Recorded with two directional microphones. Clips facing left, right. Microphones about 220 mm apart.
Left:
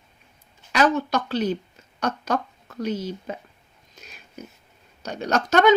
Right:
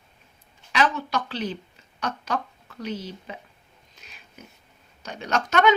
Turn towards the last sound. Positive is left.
turn(degrees=35)  # may be behind; listen again after turning